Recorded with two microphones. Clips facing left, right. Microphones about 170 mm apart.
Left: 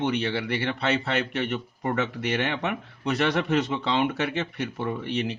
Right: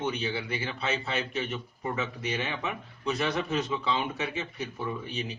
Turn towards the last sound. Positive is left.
turn(degrees=75)  # may be behind; listen again after turning